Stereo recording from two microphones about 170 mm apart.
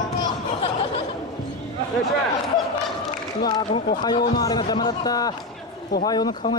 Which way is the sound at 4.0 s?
25° left (ahead or behind).